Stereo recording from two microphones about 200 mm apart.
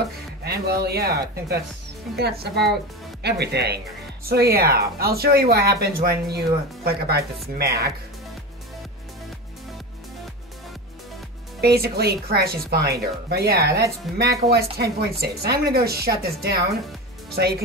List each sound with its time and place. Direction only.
0.4 s speech: 55° right (ahead or behind)
11.6 s speech: 50° right (ahead or behind)
14.1 s speech: centre (ahead or behind)
14.5 s speech: 50° right (ahead or behind)